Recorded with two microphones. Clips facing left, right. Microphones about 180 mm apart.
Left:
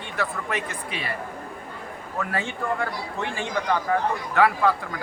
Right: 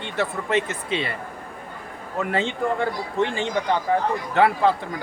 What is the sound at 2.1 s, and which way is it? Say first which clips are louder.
Speech: right 5 dB; 20° right (ahead or behind).